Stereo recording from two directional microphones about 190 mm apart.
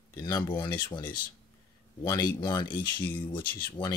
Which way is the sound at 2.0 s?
20° left (ahead or behind).